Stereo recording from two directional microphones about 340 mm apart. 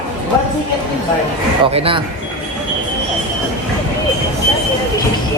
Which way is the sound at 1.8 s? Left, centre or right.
Centre.